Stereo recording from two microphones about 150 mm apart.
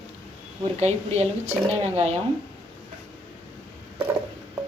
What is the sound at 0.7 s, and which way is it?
A woman's voice, 45° right (ahead or behind).